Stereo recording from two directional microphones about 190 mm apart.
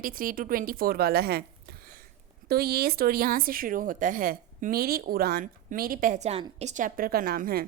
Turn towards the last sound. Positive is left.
turn(degrees=-55)  # may be behind; listen again after turning